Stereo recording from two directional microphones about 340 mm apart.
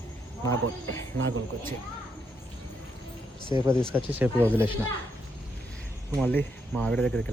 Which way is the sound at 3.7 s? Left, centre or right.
Centre.